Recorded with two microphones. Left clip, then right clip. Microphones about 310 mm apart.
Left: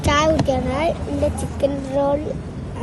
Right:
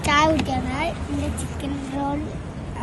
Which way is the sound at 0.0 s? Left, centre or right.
Centre.